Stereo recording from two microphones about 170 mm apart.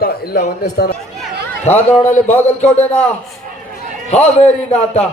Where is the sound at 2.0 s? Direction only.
45° left (ahead or behind).